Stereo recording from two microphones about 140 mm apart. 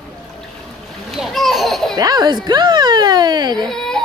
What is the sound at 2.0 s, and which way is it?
Speech, 25° right (ahead or behind).